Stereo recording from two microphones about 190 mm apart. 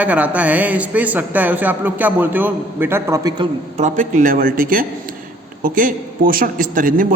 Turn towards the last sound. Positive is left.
turn(degrees=-45)  # may be behind; listen again after turning